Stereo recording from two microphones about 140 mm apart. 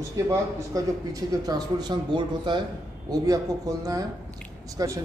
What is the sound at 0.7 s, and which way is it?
Speech, 25° right (ahead or behind).